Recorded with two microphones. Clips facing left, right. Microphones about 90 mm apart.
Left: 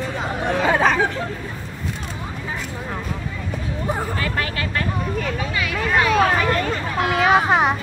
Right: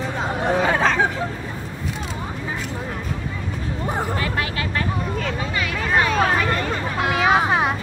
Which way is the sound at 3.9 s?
20° right (ahead or behind).